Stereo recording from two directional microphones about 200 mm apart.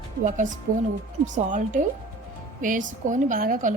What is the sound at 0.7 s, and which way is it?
A woman's voice, 40° right (ahead or behind).